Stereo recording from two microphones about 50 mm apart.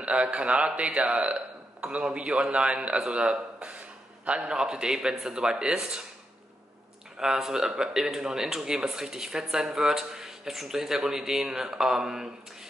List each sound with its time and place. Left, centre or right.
0.0 s a man's voice: right
7.2 s a man's voice: centre